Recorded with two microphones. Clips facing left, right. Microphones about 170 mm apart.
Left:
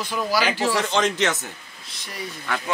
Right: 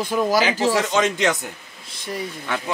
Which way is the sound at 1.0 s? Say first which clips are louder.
Right 2 dB; centre (ahead or behind).